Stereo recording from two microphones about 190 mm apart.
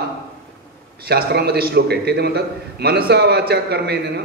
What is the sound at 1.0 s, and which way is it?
A man's voice, 55° right (ahead or behind).